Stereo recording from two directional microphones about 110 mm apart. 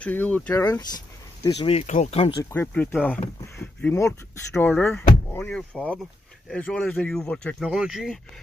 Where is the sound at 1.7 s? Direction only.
75° left (ahead or behind); by 2.4 s 60° left (ahead or behind).